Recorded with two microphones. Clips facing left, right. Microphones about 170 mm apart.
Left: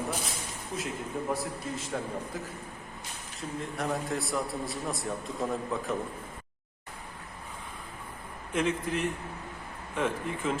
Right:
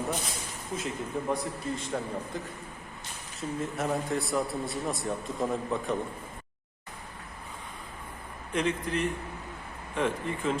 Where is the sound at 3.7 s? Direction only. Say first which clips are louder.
Right 1 dB; centre (ahead or behind).